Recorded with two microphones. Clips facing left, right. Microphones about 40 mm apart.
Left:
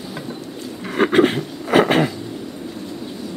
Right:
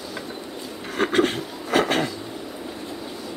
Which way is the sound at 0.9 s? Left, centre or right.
Left.